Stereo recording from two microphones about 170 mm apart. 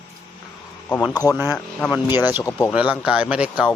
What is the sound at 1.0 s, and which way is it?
Speech, 20° left (ahead or behind).